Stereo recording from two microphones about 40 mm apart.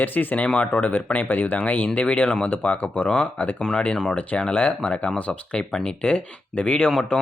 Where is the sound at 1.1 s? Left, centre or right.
Left.